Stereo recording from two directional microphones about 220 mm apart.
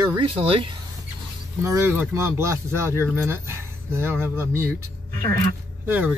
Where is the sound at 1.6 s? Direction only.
10° right (ahead or behind).